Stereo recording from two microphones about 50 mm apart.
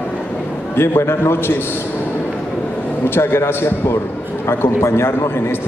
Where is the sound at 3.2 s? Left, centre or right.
Left.